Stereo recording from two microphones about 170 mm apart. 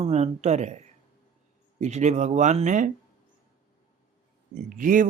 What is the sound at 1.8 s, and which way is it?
Speech, 45° right (ahead or behind).